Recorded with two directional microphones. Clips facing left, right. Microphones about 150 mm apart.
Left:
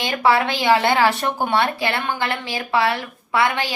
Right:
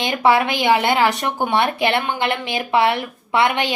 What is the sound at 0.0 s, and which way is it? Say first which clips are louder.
Speech: right 2 dB; 20° right (ahead or behind).